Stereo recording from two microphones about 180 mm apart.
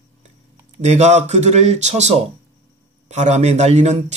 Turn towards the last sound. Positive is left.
turn(degrees=-40)  # may be behind; listen again after turning